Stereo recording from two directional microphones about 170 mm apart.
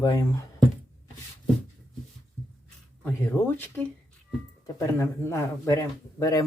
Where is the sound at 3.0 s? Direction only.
10° left (ahead or behind).